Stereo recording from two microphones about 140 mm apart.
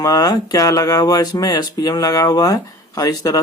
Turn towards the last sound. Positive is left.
turn(degrees=25)  # may be behind; listen again after turning